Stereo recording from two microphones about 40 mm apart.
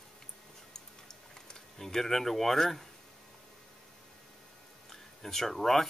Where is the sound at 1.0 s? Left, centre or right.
Centre.